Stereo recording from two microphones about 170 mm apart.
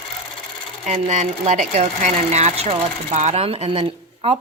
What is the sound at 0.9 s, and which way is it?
Speech, 45° right (ahead or behind).